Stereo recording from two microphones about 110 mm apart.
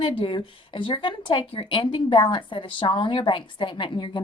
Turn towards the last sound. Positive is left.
turn(degrees=45)  # may be behind; listen again after turning